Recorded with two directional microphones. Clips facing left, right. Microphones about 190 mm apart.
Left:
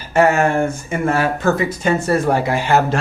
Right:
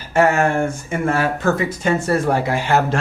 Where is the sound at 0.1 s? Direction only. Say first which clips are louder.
Left 1 dB; 20° left (ahead or behind).